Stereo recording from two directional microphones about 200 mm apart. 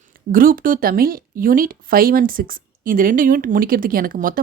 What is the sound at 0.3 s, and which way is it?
Speech, 45° right (ahead or behind).